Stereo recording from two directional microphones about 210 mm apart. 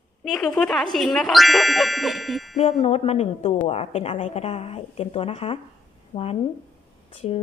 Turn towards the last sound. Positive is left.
turn(degrees=30)  # may be behind; listen again after turning